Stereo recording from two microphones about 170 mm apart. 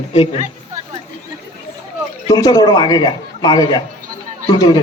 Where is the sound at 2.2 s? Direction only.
25° left (ahead or behind).